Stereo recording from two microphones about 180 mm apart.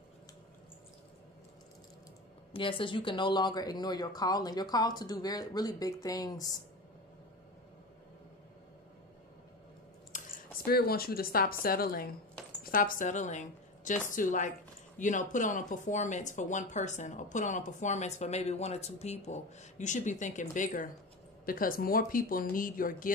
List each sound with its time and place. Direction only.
2.5 s speech: 30° left (ahead or behind)
10.1 s a woman's voice: 55° left (ahead or behind)